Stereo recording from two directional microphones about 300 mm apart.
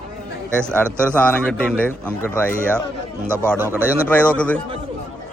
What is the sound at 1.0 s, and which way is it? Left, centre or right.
A man's voice, centre.